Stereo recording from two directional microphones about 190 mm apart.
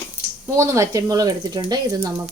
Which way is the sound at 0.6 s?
15° right (ahead or behind).